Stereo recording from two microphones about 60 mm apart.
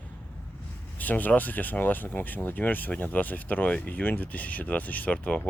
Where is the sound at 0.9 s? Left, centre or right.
Left.